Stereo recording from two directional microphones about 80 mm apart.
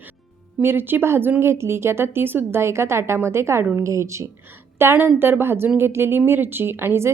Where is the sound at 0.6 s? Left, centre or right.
Right.